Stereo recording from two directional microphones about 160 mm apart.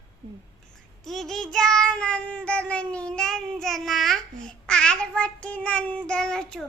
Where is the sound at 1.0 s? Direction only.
Centre (ahead or behind).